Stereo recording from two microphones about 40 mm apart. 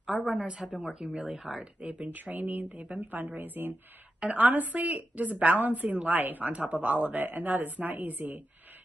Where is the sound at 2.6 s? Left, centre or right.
Right.